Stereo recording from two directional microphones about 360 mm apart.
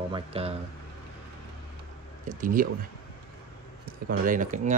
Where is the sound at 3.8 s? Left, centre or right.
Right.